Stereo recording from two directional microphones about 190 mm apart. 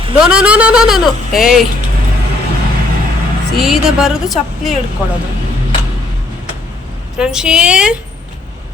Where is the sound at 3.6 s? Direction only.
Centre (ahead or behind).